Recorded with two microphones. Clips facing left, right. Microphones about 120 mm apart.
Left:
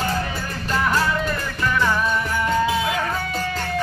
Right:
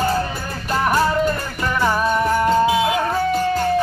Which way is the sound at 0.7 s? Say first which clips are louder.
Right 3 dB; 25° right (ahead or behind).